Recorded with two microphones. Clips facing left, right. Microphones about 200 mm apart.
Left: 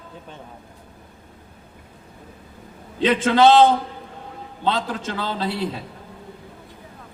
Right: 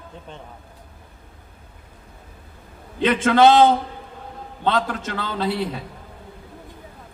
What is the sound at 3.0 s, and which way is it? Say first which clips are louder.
Speech: even; 50° right (ahead or behind).